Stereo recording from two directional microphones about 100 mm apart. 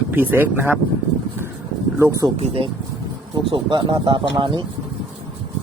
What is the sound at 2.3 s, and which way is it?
Speech, 90° right.